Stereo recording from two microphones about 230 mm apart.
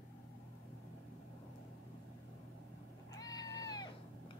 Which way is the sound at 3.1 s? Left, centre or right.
Centre.